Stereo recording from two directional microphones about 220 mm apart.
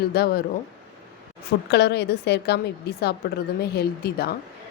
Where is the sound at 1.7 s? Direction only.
50° left (ahead or behind).